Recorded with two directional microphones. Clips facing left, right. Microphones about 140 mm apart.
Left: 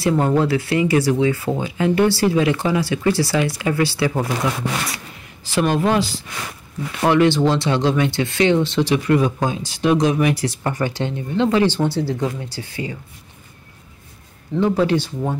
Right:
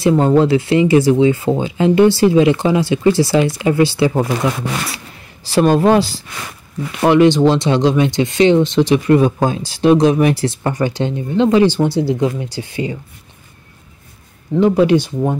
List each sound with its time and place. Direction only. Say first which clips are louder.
0.0 s speech: right 5 dB; 20° right (ahead or behind)
4.9 s speech: right 1 dB; 35° right (ahead or behind)
6.9 s speech: right 5 dB; 20° right (ahead or behind)
14.5 s speech: right 6 dB; 15° right (ahead or behind)